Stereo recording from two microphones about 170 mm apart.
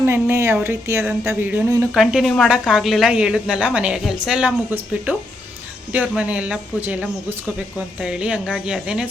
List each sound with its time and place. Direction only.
0.0 s a woman's voice: 15° right (ahead or behind)